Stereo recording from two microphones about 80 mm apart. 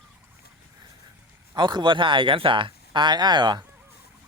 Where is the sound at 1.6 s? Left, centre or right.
Right.